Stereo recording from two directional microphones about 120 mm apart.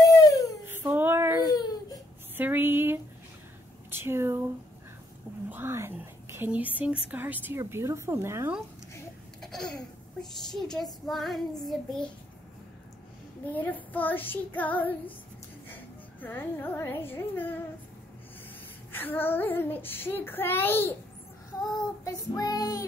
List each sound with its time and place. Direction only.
0.0 s a sound: 30° left (ahead or behind)
0.7 s a sound: 20° right (ahead or behind)
1.4 s baby cry: 35° left (ahead or behind)
2.3 s a woman's voice: 15° right (ahead or behind)
5.5 s a woman's voice: 20° right (ahead or behind)
9.4 s babbling: 5° left (ahead or behind)
10.5 s child singing: centre (ahead or behind)
13.5 s child singing: 15° left (ahead or behind)
15.7 s a child's voice: 15° left (ahead or behind)
18.9 s child singing: 15° left (ahead or behind)
22.0 s child singing: 30° left (ahead or behind)